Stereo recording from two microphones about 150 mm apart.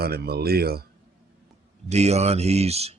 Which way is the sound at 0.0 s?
90° right.